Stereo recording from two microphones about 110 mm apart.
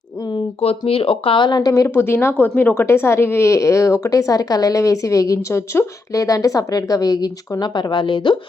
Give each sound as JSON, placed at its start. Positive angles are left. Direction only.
{"t": 0.6, "sound": "a woman's voice", "side_deg": 60}